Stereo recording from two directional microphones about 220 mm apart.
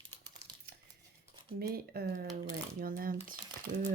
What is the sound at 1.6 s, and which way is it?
Speech, 45° right (ahead or behind).